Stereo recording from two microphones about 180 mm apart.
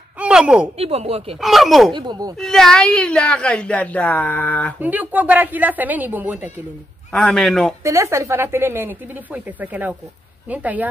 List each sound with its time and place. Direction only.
0.2 s a sound: 5° right (ahead or behind)
0.7 s speech: 35° right (ahead or behind)
1.4 s a woman's voice: centre (ahead or behind)
2.0 s speech: 25° right (ahead or behind)
2.3 s a woman's voice: centre (ahead or behind)
4.7 s speech: 10° right (ahead or behind)
7.1 s a woman's voice: 5° left (ahead or behind)
7.8 s speech: 15° right (ahead or behind)